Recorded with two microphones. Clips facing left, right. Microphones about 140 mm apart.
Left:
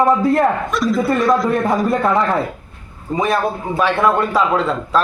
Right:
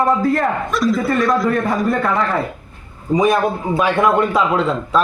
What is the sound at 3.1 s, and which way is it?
Speech, centre (ahead or behind).